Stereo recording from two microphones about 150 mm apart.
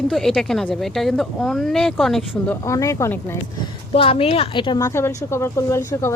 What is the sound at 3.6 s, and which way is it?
A woman's voice, 35° left (ahead or behind).